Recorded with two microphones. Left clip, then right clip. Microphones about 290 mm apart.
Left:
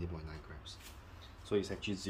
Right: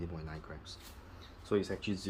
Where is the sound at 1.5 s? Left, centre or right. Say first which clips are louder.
Right 2 dB; centre.